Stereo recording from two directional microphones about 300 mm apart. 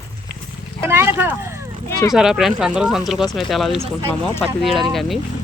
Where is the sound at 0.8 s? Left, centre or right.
Centre.